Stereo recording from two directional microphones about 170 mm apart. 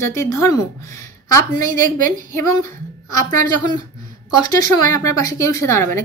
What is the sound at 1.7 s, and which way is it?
Speech, 50° right (ahead or behind).